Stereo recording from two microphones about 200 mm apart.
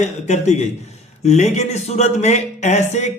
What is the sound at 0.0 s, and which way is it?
Speech, 35° left (ahead or behind).